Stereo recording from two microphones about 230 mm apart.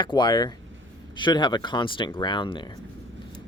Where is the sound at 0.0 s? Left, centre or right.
Centre.